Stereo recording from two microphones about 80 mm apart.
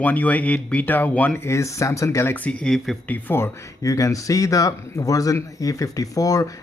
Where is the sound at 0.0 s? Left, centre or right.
Left.